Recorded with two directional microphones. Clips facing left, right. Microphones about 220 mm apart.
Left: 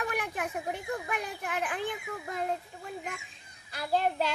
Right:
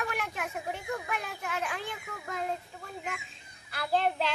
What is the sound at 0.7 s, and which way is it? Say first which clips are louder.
A child's voice: left 1 dB; 15° left (ahead or behind).